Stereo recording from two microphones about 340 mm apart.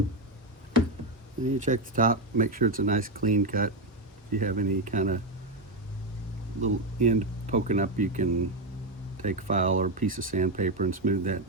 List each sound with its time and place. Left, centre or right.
1.5 s speech: right
6.6 s speech: right